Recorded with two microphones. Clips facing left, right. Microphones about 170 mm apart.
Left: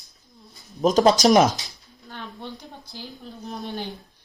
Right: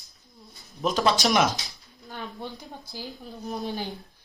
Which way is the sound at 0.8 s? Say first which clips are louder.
Left 7 dB; 40° left (ahead or behind).